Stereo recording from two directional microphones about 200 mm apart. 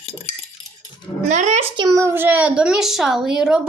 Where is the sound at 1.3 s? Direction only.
35° right (ahead or behind).